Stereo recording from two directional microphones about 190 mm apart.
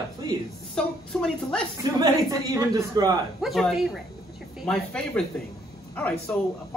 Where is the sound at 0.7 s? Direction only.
5° left (ahead or behind).